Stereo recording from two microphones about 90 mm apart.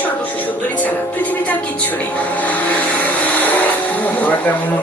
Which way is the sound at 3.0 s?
20° left (ahead or behind).